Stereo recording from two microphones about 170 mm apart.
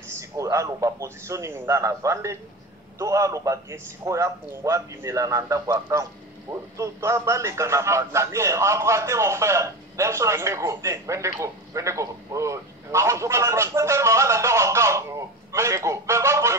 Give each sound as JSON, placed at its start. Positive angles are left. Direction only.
{"t": 0.1, "sound": "a man's voice", "side_deg": -20}